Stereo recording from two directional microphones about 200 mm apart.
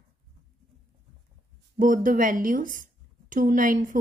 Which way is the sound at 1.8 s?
45° right (ahead or behind).